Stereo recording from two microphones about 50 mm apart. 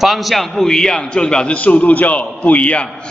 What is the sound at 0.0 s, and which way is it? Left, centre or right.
A man's voice, centre.